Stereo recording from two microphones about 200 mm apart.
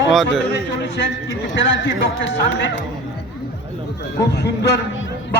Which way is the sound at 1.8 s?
65° left (ahead or behind).